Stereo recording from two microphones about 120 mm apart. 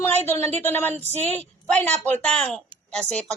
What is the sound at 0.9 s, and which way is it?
Speech, 65° right (ahead or behind).